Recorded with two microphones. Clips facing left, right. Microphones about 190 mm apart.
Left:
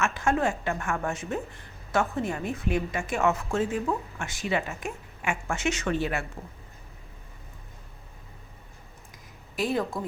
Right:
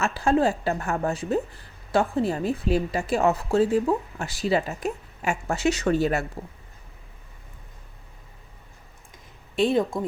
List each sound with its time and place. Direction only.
0.0 s a woman's voice: 35° right (ahead or behind)
9.6 s speech: 25° right (ahead or behind)